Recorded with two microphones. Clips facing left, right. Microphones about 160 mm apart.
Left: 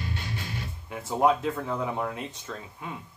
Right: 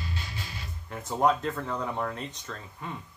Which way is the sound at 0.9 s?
5° left (ahead or behind).